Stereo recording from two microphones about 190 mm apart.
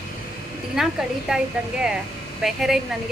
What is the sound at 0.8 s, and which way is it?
Speech, 5° right (ahead or behind).